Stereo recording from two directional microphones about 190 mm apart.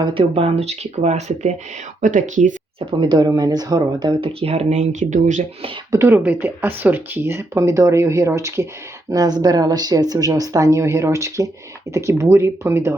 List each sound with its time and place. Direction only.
0.0 s speech: 25° right (ahead or behind)
3.0 s speech: 25° right (ahead or behind)
5.9 s speech: 10° right (ahead or behind)